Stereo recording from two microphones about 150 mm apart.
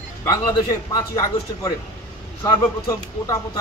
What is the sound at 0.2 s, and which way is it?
A man's voice, 25° left (ahead or behind).